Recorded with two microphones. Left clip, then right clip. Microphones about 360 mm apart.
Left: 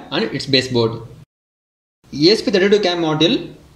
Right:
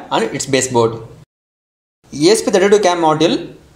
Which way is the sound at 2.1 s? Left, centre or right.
Centre.